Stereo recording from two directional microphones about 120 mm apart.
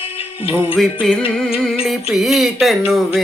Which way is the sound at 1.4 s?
Centre (ahead or behind).